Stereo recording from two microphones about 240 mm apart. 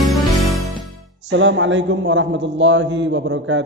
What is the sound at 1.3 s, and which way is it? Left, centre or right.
A man's voice, right.